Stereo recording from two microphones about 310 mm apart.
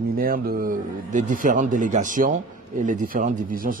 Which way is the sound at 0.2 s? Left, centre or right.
Right.